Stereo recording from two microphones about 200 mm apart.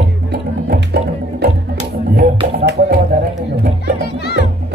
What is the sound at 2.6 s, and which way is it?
Music, 55° right (ahead or behind).